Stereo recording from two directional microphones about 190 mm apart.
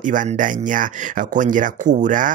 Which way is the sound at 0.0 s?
45° right (ahead or behind).